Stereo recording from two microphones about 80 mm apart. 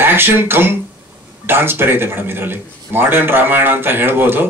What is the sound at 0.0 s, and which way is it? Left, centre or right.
Speech, right.